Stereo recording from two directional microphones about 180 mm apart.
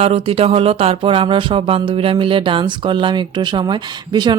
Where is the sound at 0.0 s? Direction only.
35° right (ahead or behind).